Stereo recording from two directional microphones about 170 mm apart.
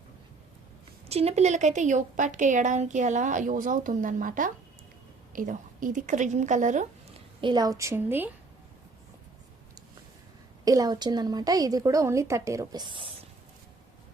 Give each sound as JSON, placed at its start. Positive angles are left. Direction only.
{"t": 1.0, "sound": "a woman's voice", "side_deg": -35}
{"t": 7.4, "sound": "a woman's voice", "side_deg": -25}
{"t": 10.7, "sound": "a woman's voice", "side_deg": -20}